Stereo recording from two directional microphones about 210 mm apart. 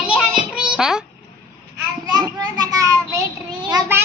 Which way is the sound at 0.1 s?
5° right (ahead or behind).